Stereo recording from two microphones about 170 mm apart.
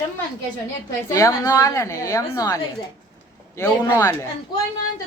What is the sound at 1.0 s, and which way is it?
A woman's voice, 20° left (ahead or behind).